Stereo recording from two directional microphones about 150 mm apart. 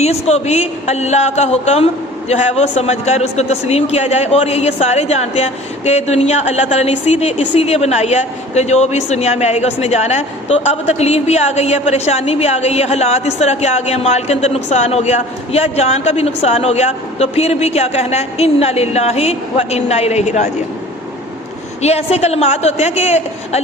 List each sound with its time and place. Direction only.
0.0 s a man's voice: 45° left (ahead or behind)
21.8 s a man's voice: 45° left (ahead or behind)